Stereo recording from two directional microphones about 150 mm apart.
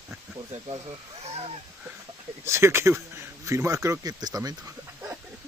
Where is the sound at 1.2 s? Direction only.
45° right (ahead or behind).